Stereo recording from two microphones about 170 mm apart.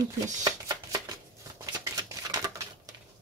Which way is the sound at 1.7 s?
20° right (ahead or behind).